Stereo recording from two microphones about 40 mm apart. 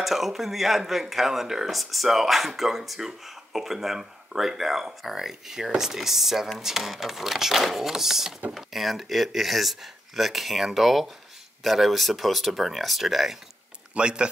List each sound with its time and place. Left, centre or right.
0.0 s speech: centre
13.9 s speech: right